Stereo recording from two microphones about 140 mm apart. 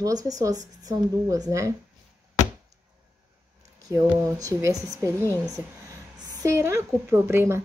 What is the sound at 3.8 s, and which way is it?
A woman's voice, 25° right (ahead or behind).